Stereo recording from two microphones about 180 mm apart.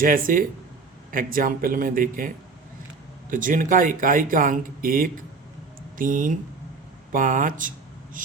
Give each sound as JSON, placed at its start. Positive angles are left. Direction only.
{"t": 0.0, "sound": "speech", "side_deg": -50}